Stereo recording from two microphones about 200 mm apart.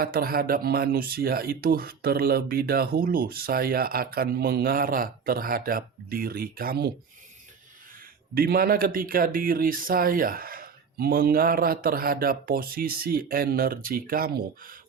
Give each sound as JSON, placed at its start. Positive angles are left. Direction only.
{"t": 0.0, "sound": "speech", "side_deg": -50}
{"t": 8.4, "sound": "speech", "side_deg": -50}